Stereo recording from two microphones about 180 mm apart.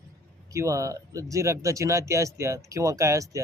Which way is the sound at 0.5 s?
15° right (ahead or behind).